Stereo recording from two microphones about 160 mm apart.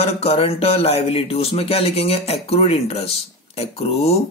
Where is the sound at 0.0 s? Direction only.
40° left (ahead or behind).